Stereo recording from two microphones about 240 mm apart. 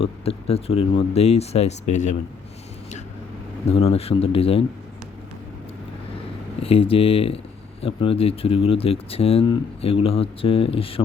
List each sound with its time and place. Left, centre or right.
0.0 s speech: left
3.7 s speech: left
6.6 s speech: left